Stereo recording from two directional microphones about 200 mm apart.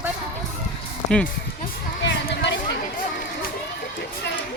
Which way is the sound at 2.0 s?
60° left (ahead or behind).